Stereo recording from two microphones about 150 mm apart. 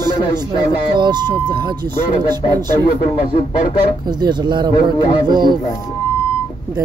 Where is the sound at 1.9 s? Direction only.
15° left (ahead or behind).